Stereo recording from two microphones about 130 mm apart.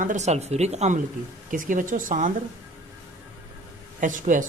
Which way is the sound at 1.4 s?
90° right.